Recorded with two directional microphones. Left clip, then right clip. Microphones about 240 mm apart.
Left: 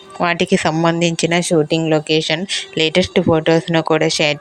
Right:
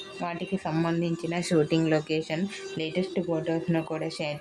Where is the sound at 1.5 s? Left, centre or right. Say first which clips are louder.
Left 5 dB; left.